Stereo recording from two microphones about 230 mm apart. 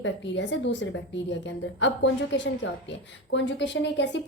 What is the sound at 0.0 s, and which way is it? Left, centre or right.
A woman's voice, left.